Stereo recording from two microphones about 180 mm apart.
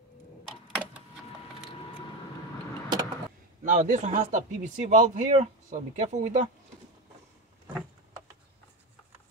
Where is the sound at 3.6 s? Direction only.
40° right (ahead or behind).